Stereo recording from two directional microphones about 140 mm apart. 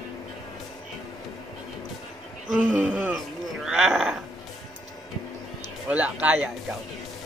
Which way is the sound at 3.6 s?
5° right (ahead or behind).